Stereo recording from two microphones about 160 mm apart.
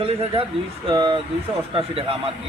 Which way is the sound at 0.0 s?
40° right (ahead or behind).